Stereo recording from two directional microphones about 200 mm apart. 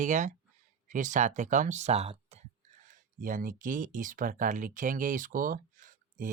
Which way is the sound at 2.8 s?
40° right (ahead or behind).